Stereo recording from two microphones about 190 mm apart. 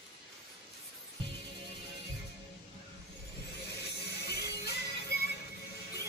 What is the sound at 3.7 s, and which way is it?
Music, 55° left (ahead or behind).